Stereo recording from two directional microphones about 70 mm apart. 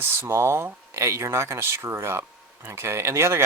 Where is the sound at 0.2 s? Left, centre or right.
Right.